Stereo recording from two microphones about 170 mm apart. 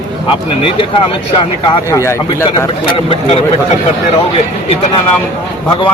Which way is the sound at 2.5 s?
30° left (ahead or behind).